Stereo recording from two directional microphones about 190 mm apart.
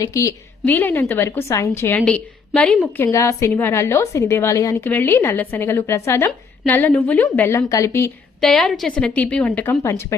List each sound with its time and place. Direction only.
0.0 s a woman's voice: 15° left (ahead or behind)
3.1 s a woman's voice: 15° left (ahead or behind)
8.4 s a woman's voice: centre (ahead or behind)